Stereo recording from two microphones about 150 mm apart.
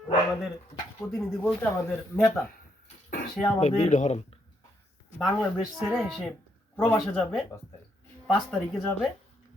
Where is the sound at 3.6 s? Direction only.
50° left (ahead or behind).